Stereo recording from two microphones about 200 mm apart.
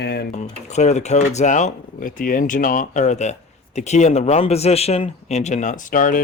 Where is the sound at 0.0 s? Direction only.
50° left (ahead or behind).